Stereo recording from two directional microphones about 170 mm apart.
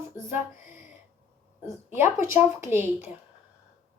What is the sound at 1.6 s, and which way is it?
A child's voice, 15° right (ahead or behind).